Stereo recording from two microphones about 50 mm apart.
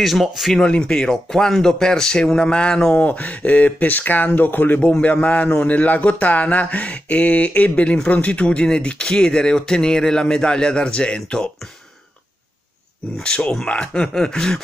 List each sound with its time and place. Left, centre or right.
0.0 s speech: centre
0.6 s speech: centre
2.9 s a man's voice: left; by 11.5 s centre
13.5 s speech: centre